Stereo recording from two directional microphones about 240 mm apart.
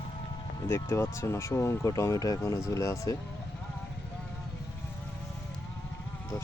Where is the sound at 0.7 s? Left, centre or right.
Centre.